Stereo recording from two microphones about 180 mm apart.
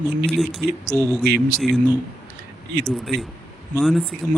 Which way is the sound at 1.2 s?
60° right (ahead or behind).